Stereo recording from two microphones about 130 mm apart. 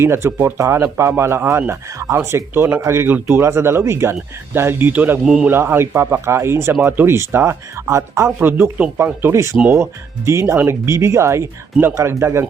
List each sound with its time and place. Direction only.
0.0 s a man's voice: 20° right (ahead or behind)
5.5 s speech: 15° right (ahead or behind)